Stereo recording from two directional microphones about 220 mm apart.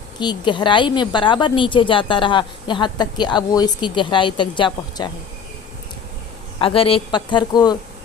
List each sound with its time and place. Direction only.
0.2 s a woman's voice: 20° left (ahead or behind)
6.6 s a woman's voice: 25° left (ahead or behind)